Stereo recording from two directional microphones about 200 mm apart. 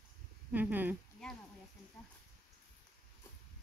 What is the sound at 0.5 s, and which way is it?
Speech, 10° right (ahead or behind).